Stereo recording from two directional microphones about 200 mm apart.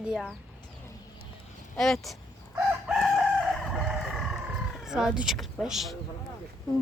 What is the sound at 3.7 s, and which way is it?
Frog, centre (ahead or behind).